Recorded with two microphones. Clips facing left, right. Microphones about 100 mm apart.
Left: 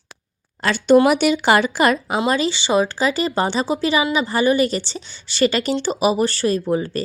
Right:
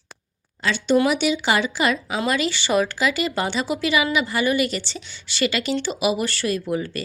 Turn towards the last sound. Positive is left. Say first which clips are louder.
# left 4 dB
turn(degrees=35)  # may be behind; listen again after turning